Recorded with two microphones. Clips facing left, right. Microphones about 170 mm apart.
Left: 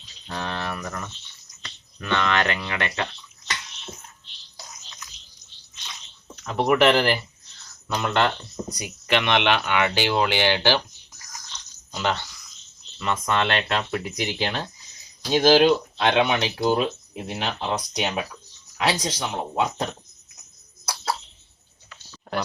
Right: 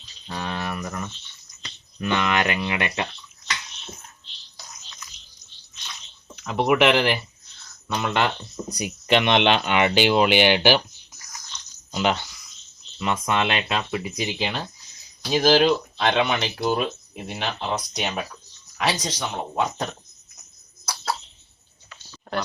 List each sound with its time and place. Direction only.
0.3 s cricket: 10° right (ahead or behind)
1.6 s speech: 15° right (ahead or behind)
6.3 s speech: 5° right (ahead or behind)
8.8 s speech: 20° right (ahead or behind)
11.9 s speech: 15° right (ahead or behind); by 20.0 s 5° left (ahead or behind)
20.8 s a sound: 10° left (ahead or behind)